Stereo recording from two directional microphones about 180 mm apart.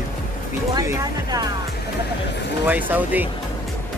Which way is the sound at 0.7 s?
20° right (ahead or behind).